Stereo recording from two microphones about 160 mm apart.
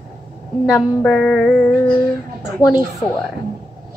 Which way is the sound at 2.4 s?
20° left (ahead or behind).